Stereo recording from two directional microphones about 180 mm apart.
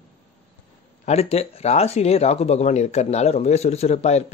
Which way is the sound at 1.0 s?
35° left (ahead or behind).